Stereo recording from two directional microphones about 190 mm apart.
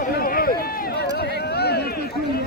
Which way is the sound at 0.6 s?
50° left (ahead or behind).